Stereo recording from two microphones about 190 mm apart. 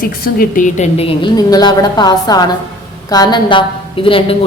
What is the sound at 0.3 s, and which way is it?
A woman's voice, 45° left (ahead or behind).